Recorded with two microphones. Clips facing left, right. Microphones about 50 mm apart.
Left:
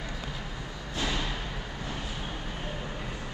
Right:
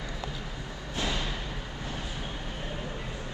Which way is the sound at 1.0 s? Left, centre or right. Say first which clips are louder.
Left 1 dB; left.